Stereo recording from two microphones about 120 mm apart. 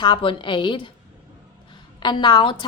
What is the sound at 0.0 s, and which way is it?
Speech, 45° left (ahead or behind).